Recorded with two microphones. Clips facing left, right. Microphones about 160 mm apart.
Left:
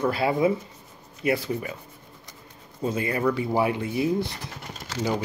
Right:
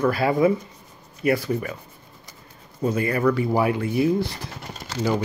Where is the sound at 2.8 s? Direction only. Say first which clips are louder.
Right 3 dB; 20° left (ahead or behind).